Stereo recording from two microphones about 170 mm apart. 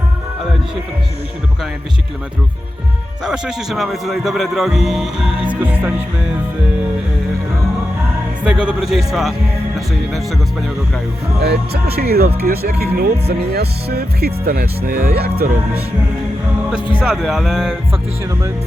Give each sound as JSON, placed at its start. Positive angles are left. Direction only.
{"t": 3.2, "sound": "a man's voice", "side_deg": -5}
{"t": 8.4, "sound": "a man's voice", "side_deg": -5}
{"t": 11.3, "sound": "speech", "side_deg": -70}
{"t": 17.0, "sound": "a man's voice", "side_deg": -5}